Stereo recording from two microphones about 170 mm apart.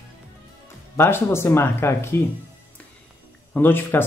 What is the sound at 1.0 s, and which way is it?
Speech, 15° left (ahead or behind).